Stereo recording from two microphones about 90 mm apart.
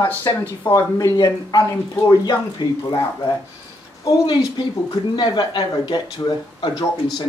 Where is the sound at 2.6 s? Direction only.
55° left (ahead or behind).